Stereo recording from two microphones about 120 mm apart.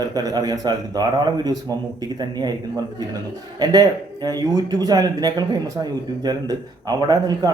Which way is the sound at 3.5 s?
35° right (ahead or behind).